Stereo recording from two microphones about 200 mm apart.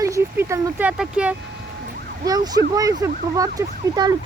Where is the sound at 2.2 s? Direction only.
20° right (ahead or behind).